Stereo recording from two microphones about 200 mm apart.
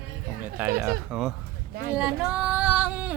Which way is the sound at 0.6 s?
10° right (ahead or behind).